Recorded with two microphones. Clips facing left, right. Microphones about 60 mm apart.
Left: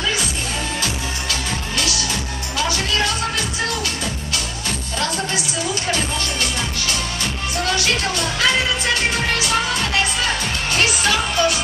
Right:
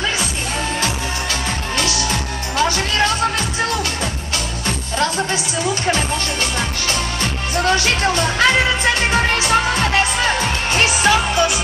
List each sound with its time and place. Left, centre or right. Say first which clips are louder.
1.8 s music: right 3 dB; right
4.6 s music: right 5 dB; right
7.5 s music: right 4 dB; right